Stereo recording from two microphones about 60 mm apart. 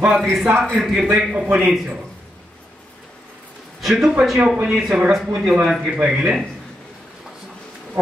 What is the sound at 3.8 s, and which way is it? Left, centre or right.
A man's voice, centre.